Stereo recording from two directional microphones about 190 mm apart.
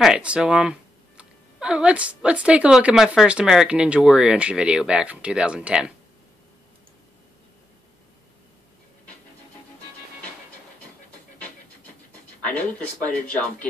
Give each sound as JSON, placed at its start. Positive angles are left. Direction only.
{"t": 0.0, "sound": "speech", "side_deg": -5}
{"t": 12.4, "sound": "speech", "side_deg": 5}